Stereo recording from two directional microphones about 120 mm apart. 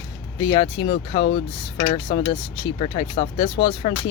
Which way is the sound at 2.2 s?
35° left (ahead or behind).